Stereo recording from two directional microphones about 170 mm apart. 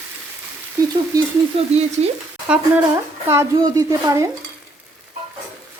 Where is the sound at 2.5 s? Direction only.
5° right (ahead or behind).